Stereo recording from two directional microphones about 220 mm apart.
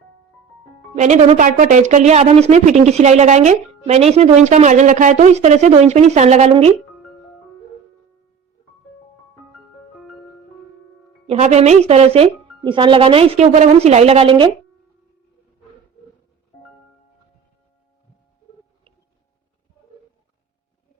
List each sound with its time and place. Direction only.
0.9 s a woman's voice: 30° right (ahead or behind)
11.3 s speech: 30° right (ahead or behind)